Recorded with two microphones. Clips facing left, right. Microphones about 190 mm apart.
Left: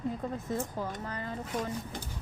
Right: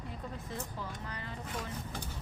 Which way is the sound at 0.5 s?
45° left (ahead or behind).